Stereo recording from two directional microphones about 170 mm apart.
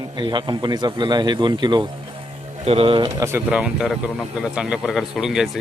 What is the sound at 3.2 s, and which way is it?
Speech, 15° right (ahead or behind).